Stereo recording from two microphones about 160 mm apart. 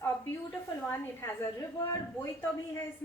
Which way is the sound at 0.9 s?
15° left (ahead or behind).